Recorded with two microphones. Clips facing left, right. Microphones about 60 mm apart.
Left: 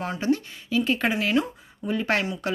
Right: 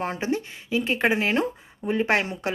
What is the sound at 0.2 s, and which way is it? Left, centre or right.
Speech, right.